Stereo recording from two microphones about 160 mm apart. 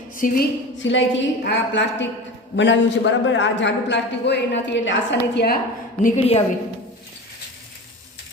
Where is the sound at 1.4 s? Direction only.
90° left.